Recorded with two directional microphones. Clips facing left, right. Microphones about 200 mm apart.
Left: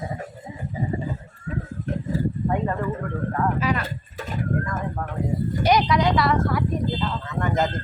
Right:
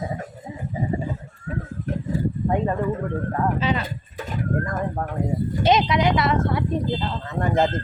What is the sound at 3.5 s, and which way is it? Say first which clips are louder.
Speech: right 1 dB; 25° right (ahead or behind).